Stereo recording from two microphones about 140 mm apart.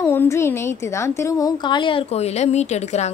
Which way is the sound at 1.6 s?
35° left (ahead or behind).